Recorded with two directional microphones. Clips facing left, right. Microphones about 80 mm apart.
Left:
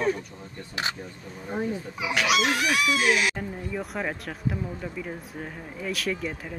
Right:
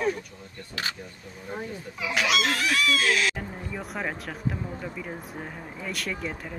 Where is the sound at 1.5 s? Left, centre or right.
Centre.